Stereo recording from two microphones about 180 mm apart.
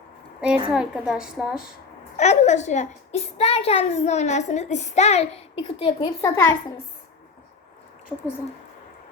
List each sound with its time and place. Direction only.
0.7 s a woman's voice: 5° right (ahead or behind)
2.1 s a child's voice: 40° left (ahead or behind); by 6.6 s 15° left (ahead or behind)